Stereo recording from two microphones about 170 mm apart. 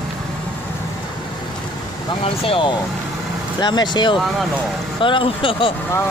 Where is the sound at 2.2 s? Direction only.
35° left (ahead or behind).